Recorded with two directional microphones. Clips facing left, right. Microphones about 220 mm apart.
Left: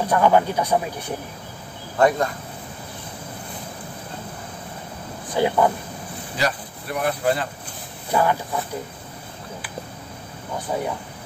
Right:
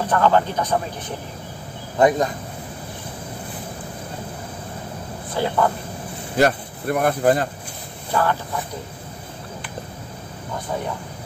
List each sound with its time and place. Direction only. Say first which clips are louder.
0.0 s a man's voice: left 1 dB; 10° left (ahead or behind)
2.0 s speech: right 2 dB; 20° right (ahead or behind)
5.3 s a man's voice: left 2 dB; 15° left (ahead or behind)
6.3 s speech: right 7 dB; 50° right (ahead or behind)
8.1 s a man's voice: left 1 dB; 15° left (ahead or behind)